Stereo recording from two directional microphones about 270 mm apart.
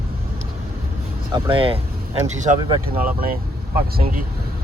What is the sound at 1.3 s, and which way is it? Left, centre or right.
Speech, centre.